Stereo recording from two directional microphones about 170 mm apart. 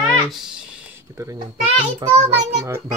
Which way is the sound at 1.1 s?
20° right (ahead or behind).